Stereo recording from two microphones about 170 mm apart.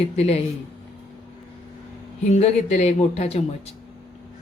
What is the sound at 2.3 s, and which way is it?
Speech, 40° left (ahead or behind).